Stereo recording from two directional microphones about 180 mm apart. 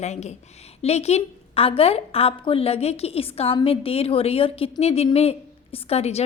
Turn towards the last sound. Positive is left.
turn(degrees=35)  # may be behind; listen again after turning